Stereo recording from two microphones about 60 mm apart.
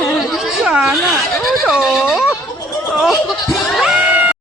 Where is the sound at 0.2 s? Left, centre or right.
Centre.